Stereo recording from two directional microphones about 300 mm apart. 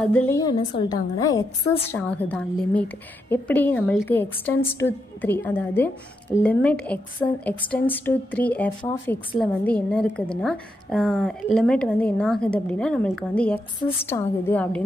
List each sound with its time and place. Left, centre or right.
0.0 s a woman's voice: centre